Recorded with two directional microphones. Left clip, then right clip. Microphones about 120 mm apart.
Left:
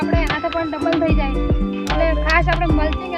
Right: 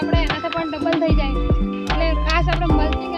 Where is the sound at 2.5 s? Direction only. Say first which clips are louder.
Left 2 dB; centre (ahead or behind).